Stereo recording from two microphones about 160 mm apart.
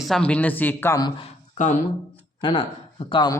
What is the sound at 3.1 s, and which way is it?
Speech, 25° left (ahead or behind).